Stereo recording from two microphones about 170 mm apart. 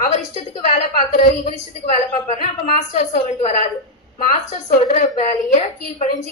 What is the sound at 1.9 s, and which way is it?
A woman's voice, 45° left (ahead or behind).